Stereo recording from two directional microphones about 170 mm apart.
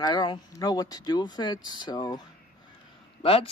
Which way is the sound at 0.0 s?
25° left (ahead or behind).